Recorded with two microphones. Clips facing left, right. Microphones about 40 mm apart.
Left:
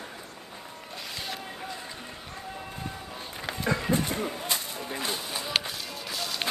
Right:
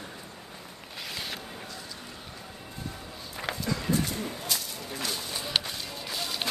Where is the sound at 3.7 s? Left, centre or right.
Left.